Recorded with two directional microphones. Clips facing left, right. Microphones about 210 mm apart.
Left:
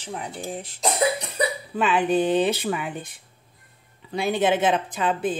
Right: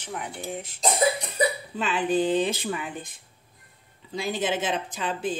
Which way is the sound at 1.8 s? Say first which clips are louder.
Left 4 dB; 60° left (ahead or behind).